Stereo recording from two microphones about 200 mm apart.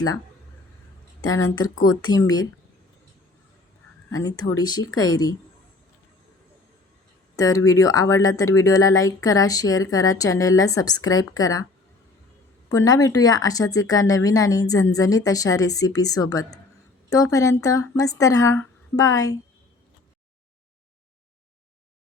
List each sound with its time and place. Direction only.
1.5 s speech: 90° left
1.8 s speech: 20° left (ahead or behind)
4.1 s speech: 15° left (ahead or behind)
4.8 s speech: 90° left
5.0 s speech: 20° left (ahead or behind)
7.3 s speech: 15° left (ahead or behind)
12.6 s speech: 15° left (ahead or behind)